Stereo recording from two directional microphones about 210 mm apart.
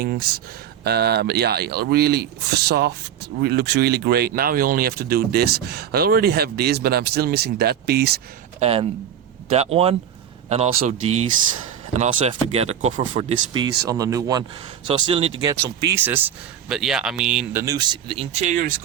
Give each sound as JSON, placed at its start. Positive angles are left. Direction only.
{"t": 0.0, "sound": "speech", "side_deg": -45}
{"t": 8.5, "sound": "speech", "side_deg": -30}
{"t": 11.9, "sound": "speech", "side_deg": -30}